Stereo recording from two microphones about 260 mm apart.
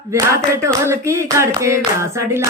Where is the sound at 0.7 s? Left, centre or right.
Centre.